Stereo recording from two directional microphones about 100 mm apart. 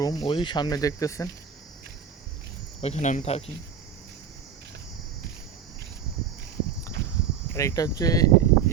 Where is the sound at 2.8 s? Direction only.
90° left.